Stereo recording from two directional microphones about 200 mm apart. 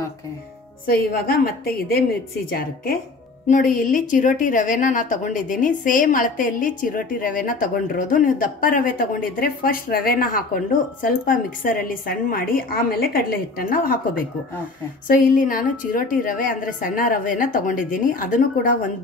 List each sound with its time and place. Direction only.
0.8 s a woman's voice: 50° left (ahead or behind)